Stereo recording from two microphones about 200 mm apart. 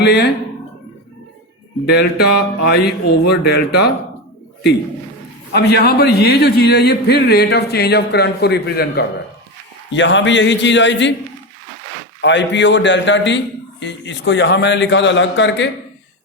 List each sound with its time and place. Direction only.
0.0 s speech: 55° left (ahead or behind)
1.9 s a man's voice: 55° left (ahead or behind)
5.5 s a man's voice: 55° left (ahead or behind)
9.9 s a man's voice: 65° left (ahead or behind)
12.2 s a man's voice: 60° left (ahead or behind)